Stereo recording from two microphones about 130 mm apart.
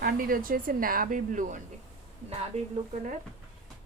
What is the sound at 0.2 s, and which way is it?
Speech, 90° right.